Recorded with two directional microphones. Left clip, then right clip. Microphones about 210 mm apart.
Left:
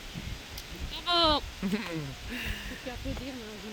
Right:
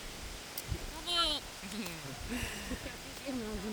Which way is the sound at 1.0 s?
50° right (ahead or behind).